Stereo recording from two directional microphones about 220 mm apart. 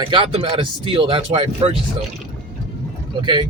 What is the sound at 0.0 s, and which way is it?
Speech, 20° right (ahead or behind).